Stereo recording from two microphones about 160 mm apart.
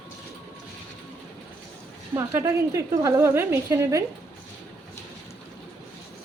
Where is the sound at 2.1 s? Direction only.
20° right (ahead or behind).